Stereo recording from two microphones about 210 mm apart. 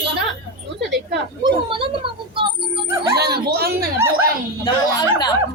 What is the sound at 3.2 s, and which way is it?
Speech, 50° right (ahead or behind).